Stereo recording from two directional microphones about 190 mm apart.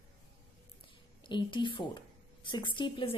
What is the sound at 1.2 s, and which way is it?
A woman's voice, 25° left (ahead or behind).